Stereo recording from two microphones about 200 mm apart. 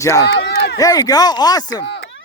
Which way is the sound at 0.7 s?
20° left (ahead or behind).